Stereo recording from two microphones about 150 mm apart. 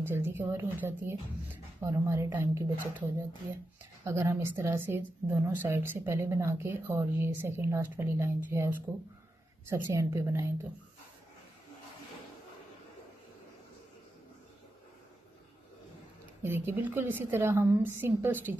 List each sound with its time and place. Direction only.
0.0 s a woman's voice: 15° right (ahead or behind)
16.4 s a woman's voice: 15° right (ahead or behind)